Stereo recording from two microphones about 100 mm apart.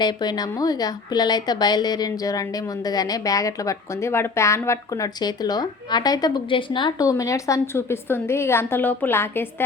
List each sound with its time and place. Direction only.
0.0 s a woman's voice: 45° left (ahead or behind)
6.5 s a woman's voice: 55° left (ahead or behind)
7.0 s a woman's voice: 35° left (ahead or behind)